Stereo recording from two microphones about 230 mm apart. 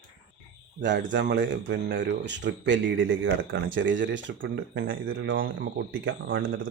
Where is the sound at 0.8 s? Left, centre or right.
Right.